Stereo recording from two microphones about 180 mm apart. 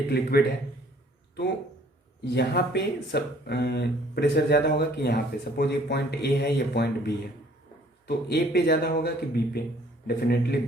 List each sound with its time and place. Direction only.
0.1 s speech: 60° left (ahead or behind)
2.3 s speech: 65° left (ahead or behind)